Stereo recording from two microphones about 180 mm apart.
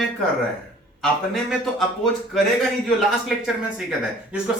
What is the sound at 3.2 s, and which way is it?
Speech, 5° right (ahead or behind).